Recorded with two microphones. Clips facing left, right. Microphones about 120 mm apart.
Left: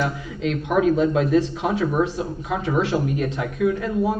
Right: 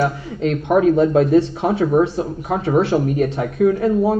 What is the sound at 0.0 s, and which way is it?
Speech, 45° right (ahead or behind).